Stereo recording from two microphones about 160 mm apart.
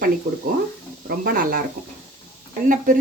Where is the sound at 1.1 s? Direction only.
65° right (ahead or behind).